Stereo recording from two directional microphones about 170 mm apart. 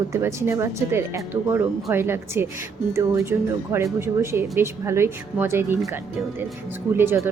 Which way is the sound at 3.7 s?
15° right (ahead or behind).